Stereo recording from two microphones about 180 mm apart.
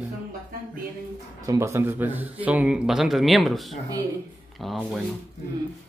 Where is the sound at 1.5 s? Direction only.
15° right (ahead or behind); by 5.0 s centre (ahead or behind).